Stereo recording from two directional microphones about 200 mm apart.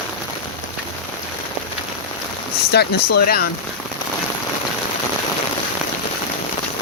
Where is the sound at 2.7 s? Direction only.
55° left (ahead or behind).